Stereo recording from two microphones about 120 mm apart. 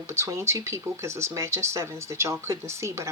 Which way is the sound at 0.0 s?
25° right (ahead or behind).